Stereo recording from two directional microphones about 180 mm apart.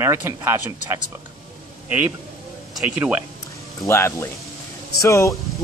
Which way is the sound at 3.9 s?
15° left (ahead or behind).